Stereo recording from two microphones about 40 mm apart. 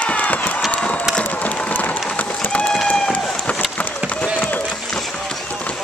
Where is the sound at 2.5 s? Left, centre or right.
Left.